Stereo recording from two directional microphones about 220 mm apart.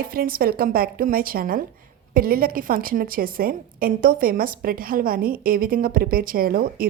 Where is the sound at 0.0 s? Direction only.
40° right (ahead or behind).